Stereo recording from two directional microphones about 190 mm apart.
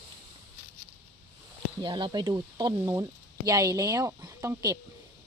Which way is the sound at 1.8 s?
25° right (ahead or behind).